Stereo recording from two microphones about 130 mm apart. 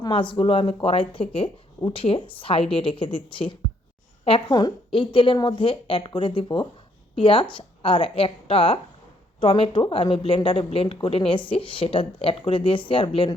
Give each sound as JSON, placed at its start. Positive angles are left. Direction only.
{"t": 0.0, "sound": "speech", "side_deg": 40}